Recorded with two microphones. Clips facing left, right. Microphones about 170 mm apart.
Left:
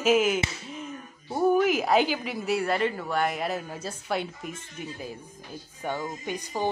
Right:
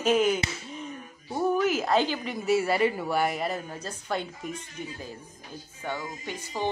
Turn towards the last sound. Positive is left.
turn(degrees=15)  # may be behind; listen again after turning